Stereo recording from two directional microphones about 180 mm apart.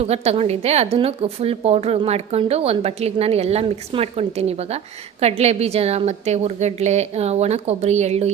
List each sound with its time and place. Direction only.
0.0 s a woman's voice: 35° right (ahead or behind)